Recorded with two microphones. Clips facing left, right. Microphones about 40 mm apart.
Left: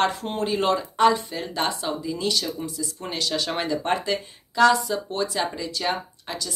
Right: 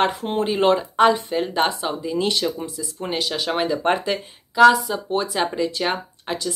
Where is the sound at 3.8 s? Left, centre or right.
Right.